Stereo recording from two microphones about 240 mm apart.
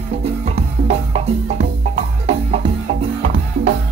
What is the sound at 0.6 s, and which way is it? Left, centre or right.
Music, right.